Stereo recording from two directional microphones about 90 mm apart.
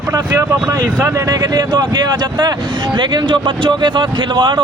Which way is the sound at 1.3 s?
55° right (ahead or behind).